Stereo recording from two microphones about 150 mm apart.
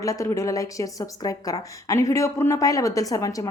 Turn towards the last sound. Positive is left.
turn(degrees=25)  # may be behind; listen again after turning